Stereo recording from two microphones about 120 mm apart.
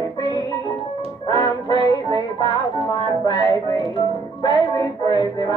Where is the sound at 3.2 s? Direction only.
40° left (ahead or behind).